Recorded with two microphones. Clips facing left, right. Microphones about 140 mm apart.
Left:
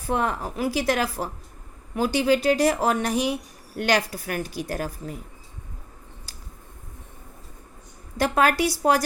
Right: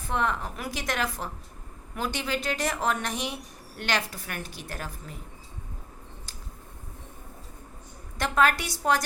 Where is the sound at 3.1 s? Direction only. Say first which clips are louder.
Left 9 dB; 10° left (ahead or behind).